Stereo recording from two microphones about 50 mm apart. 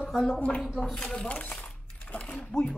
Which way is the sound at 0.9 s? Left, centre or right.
Centre.